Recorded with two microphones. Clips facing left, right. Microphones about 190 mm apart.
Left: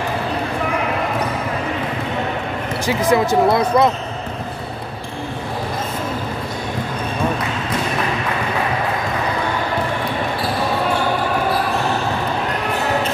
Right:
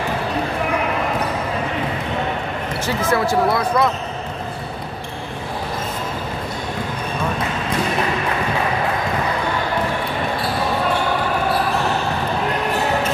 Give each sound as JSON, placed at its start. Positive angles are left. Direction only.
{"t": 2.9, "sound": "speech", "side_deg": 15}